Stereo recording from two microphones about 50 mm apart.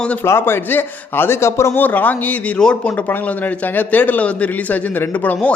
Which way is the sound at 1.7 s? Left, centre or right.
Left.